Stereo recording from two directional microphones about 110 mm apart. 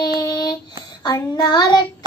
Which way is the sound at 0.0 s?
35° left (ahead or behind).